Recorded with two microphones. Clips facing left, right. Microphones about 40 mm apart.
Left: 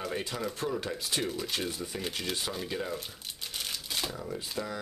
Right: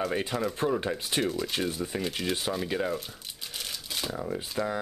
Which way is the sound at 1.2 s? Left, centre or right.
Centre.